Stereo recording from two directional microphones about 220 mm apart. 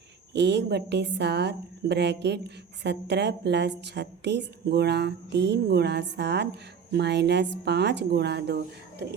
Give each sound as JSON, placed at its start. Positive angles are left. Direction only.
{"t": 0.3, "sound": "a woman's voice", "side_deg": -50}